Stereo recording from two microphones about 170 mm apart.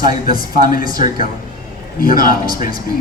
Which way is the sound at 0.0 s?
55° left (ahead or behind).